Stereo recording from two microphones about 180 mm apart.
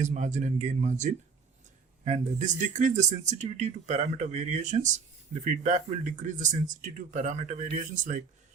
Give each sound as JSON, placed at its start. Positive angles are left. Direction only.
{"t": 0.0, "sound": "speech", "side_deg": -40}